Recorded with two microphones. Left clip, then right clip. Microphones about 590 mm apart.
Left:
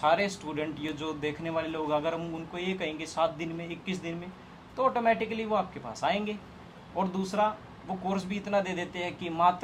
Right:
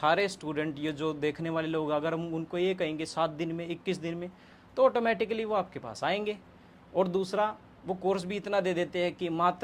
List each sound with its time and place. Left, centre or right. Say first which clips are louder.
0.0 s speech: left 1 dB; right